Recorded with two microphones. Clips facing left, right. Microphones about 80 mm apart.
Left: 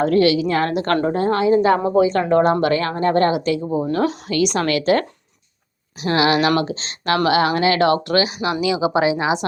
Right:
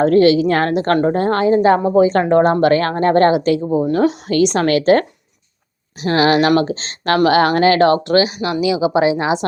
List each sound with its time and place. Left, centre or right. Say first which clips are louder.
0.0 s a woman's voice: right 4 dB; right
0.7 s speech: right 4 dB; right
1.0 s a woman's voice: right 3 dB; right
3.7 s speech: right 4 dB; centre
4.3 s a woman's voice: right 4 dB; right
7.7 s a woman's voice: right 4 dB; right
8.4 s speech: right 2 dB; centre
9.0 s a woman's voice: right 3 dB; right